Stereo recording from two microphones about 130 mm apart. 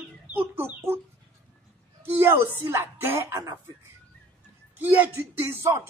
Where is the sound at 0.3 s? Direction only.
15° right (ahead or behind).